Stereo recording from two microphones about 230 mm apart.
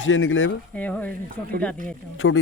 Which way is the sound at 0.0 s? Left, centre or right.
Left.